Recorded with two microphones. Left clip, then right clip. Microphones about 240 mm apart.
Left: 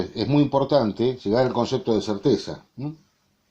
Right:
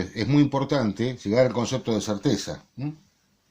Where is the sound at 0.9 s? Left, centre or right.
Right.